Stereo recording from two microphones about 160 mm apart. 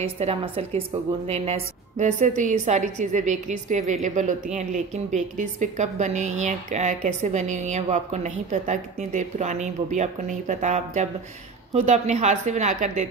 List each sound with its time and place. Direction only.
0.0 s a woman's voice: 40° right (ahead or behind)